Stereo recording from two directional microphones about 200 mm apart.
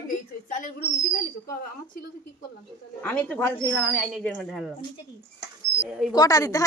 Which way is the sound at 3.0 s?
5° left (ahead or behind).